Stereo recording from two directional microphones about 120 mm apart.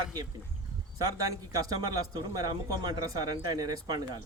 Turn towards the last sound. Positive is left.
turn(degrees=-30)  # may be behind; listen again after turning